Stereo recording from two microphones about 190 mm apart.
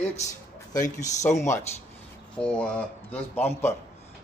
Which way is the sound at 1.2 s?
15° left (ahead or behind).